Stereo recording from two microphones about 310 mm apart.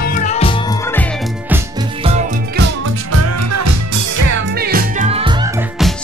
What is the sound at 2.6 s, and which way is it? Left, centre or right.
Music, right.